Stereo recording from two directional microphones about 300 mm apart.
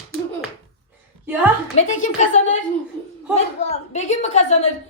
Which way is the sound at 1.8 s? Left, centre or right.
Left.